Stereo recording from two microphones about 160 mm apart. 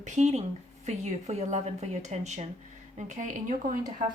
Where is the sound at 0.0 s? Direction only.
45° right (ahead or behind).